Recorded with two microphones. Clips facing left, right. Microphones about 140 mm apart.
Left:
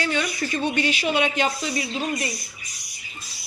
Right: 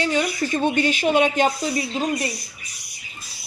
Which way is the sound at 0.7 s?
45° right (ahead or behind).